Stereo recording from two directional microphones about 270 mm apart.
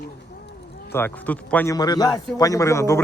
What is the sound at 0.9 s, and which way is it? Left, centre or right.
A man's voice, centre.